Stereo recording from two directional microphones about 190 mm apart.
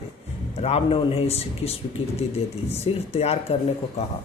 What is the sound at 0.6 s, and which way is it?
A man's voice, 35° left (ahead or behind).